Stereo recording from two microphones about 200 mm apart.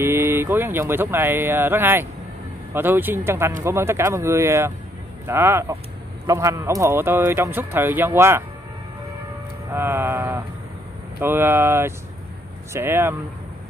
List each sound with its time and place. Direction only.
0.0 s a man's voice: 10° right (ahead or behind)
9.7 s a man's voice: 10° right (ahead or behind)